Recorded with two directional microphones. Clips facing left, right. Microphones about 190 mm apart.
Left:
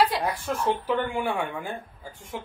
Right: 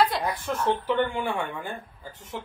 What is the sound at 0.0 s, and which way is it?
A woman's voice, 10° left (ahead or behind).